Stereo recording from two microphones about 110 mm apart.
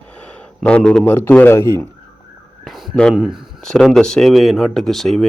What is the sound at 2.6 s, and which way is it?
Speech, centre (ahead or behind).